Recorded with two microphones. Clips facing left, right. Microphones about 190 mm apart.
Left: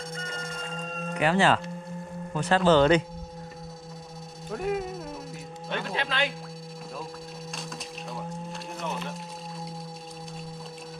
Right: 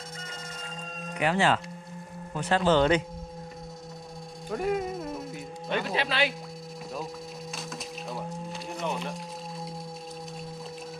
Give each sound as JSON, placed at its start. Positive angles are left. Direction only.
{"t": 0.2, "sound": "music", "side_deg": -10}
{"t": 1.1, "sound": "speech", "side_deg": -15}
{"t": 4.5, "sound": "speech", "side_deg": 0}
{"t": 8.1, "sound": "music", "side_deg": 0}